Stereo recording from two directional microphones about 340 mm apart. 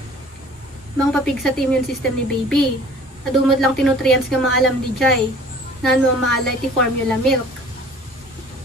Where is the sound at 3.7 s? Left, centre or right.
Centre.